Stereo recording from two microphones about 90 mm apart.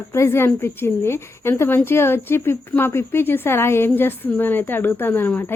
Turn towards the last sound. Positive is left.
turn(degrees=25)  # may be behind; listen again after turning